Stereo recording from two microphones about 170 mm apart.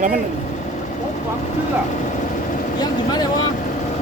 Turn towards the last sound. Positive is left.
turn(degrees=25)  # may be behind; listen again after turning